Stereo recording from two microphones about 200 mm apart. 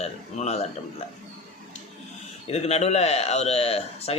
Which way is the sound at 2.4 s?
30° left (ahead or behind).